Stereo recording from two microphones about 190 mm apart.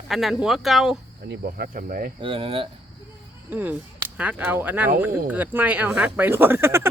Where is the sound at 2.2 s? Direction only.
30° right (ahead or behind).